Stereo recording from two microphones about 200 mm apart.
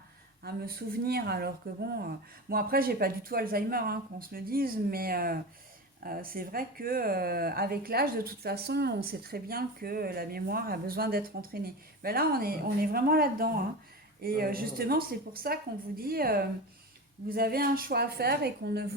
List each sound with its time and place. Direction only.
0.4 s speech: 50° right (ahead or behind)